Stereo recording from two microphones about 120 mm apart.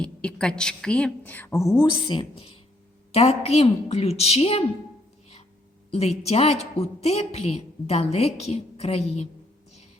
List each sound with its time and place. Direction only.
0.0 s a woman's voice: 10° left (ahead or behind); by 2.5 s 45° left (ahead or behind)
3.1 s a woman's voice: 60° left (ahead or behind)
5.9 s a woman's voice: 65° left (ahead or behind)